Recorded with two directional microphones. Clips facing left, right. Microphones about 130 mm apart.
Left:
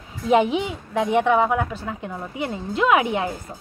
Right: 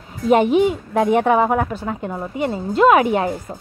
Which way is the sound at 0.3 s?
50° right (ahead or behind).